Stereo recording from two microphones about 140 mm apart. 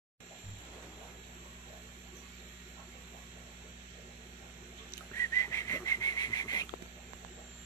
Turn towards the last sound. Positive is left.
turn(degrees=25)  # may be behind; listen again after turning